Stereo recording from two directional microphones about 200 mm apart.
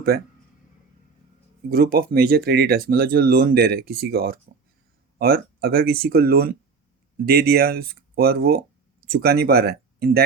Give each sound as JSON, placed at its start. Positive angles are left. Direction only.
{"t": 0.1, "sound": "speech", "side_deg": -50}
{"t": 1.7, "sound": "speech", "side_deg": -50}